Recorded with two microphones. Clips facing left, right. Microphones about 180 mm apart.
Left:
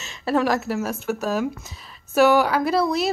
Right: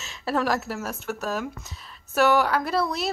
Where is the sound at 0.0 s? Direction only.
Centre (ahead or behind).